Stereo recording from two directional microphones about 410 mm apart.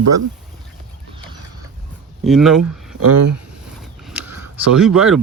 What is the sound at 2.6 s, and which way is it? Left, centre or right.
Speech, right.